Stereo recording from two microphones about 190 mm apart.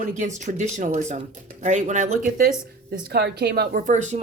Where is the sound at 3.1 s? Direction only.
60° right (ahead or behind).